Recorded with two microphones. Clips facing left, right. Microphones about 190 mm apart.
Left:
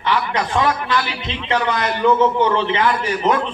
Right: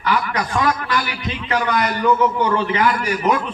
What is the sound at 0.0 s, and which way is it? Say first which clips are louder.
A man's voice: left 1 dB; 25° left (ahead or behind).